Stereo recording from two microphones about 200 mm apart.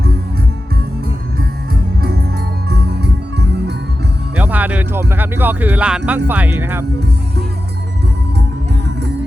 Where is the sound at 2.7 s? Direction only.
55° right (ahead or behind).